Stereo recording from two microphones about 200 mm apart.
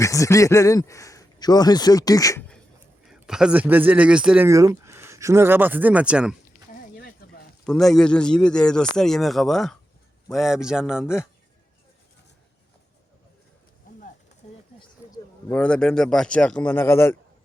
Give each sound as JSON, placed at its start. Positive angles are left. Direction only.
{"t": 0.0, "sound": "a man's voice", "side_deg": 15}
{"t": 3.1, "sound": "speech", "side_deg": -5}
{"t": 7.6, "sound": "a man's voice", "side_deg": 5}
{"t": 14.4, "sound": "a sound", "side_deg": 35}
{"t": 15.4, "sound": "a man's voice", "side_deg": 5}